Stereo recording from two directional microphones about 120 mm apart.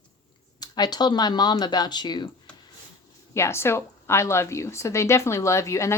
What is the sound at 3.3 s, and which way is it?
A woman's voice, 20° left (ahead or behind).